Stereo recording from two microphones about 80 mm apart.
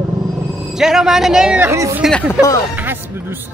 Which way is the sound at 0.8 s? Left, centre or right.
Centre.